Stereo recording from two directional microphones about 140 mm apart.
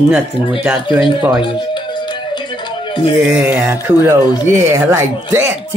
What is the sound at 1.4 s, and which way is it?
Music, 35° left (ahead or behind).